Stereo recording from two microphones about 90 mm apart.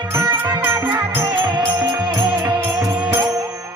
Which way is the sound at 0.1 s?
25° right (ahead or behind).